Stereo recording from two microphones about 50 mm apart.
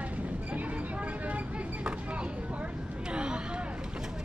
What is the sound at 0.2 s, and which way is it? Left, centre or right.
Train, right.